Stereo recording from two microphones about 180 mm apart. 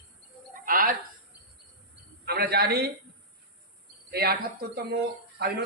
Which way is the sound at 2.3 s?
60° right (ahead or behind).